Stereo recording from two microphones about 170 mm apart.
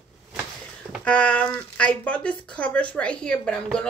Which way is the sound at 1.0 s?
10° left (ahead or behind).